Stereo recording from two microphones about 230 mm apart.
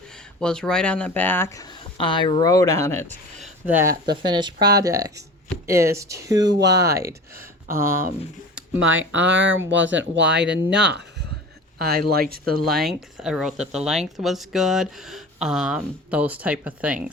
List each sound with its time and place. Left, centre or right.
0.3 s speech: centre
3.4 s a sound: centre
3.9 s speech: right
4.3 s speech: centre
8.5 s a sound: centre
9.1 s speech: right
12.6 s speech: centre